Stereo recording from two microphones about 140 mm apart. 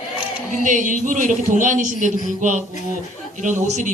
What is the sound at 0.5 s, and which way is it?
Speech, 65° right (ahead or behind).